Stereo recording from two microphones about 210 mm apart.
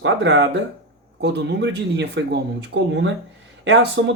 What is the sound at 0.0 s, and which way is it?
Speech, 60° right (ahead or behind).